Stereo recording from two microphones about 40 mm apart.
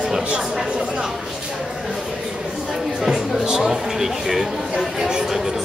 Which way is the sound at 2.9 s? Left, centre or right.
Centre.